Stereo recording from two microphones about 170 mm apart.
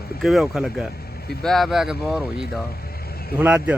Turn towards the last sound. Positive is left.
turn(degrees=-10)  # may be behind; listen again after turning